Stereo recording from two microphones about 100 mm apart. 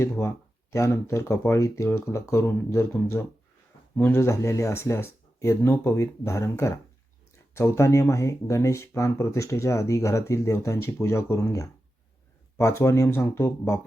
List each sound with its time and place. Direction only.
0.0 s speech: 25° left (ahead or behind)